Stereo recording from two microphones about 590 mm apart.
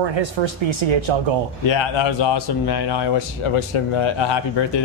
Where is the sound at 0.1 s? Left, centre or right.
Right.